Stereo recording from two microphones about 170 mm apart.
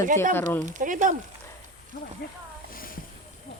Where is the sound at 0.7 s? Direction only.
50° right (ahead or behind).